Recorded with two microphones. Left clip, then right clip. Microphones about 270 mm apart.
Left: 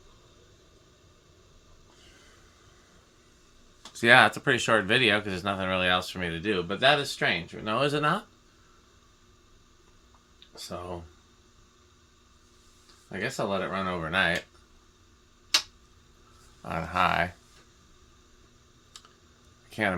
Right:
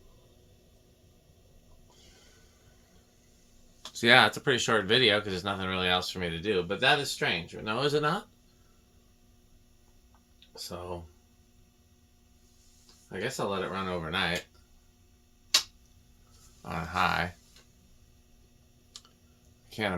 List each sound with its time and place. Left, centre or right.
3.9 s speech: left
13.1 s speech: left
16.6 s speech: left
18.9 s typing: left
19.7 s a sound: left